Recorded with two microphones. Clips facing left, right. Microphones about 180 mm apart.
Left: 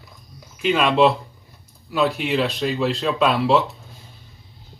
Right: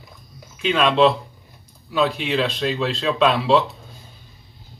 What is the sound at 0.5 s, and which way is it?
Speech, 5° left (ahead or behind).